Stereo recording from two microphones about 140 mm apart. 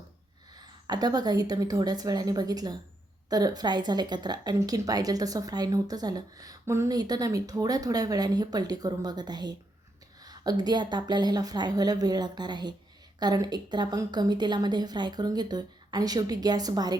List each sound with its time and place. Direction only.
0.5 s a woman's voice: 30° right (ahead or behind)